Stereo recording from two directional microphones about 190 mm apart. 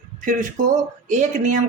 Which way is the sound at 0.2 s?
45° right (ahead or behind).